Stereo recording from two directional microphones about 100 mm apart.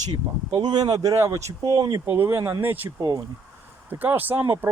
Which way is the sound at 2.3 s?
35° right (ahead or behind).